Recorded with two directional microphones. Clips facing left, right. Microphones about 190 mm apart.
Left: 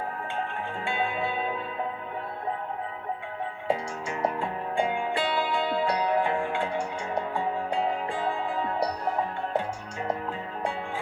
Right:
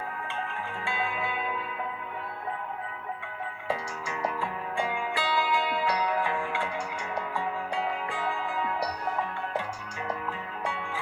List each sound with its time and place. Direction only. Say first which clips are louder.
0.9 s music: left 3 dB; 30° left (ahead or behind)
3.7 s music: left 4 dB; 30° left (ahead or behind)